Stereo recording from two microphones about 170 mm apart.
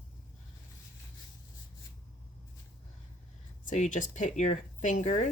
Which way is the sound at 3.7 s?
45° left (ahead or behind).